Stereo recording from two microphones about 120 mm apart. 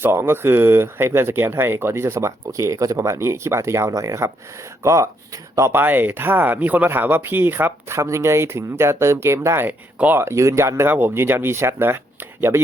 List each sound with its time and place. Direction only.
0.0 s speech: 20° right (ahead or behind)